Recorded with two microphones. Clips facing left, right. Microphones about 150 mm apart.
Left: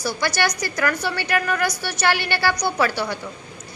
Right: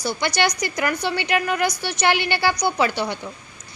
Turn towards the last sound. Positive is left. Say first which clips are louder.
# right 1 dB
turn(degrees=-20)  # may be behind; listen again after turning